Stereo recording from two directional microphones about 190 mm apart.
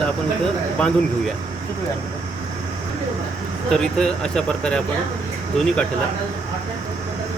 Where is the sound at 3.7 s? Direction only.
5° left (ahead or behind).